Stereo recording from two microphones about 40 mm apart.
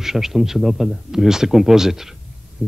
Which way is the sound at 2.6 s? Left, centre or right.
Right.